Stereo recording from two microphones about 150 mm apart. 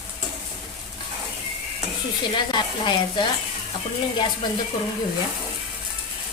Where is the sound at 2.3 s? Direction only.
30° left (ahead or behind).